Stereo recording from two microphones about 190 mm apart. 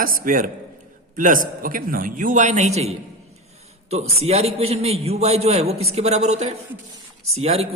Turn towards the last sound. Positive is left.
turn(degrees=-35)  # may be behind; listen again after turning